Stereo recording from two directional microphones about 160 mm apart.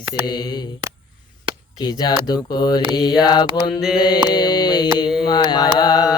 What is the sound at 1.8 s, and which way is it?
Mantra, 25° left (ahead or behind).